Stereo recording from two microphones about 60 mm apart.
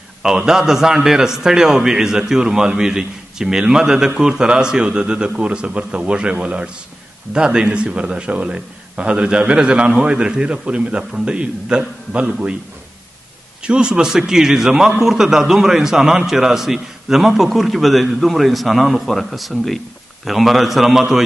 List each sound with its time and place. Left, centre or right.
0.5 s a man's voice: centre
13.6 s a man's voice: centre